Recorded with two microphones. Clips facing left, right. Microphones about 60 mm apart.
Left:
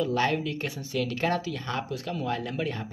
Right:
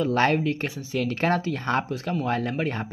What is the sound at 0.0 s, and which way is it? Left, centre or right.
Speech, right.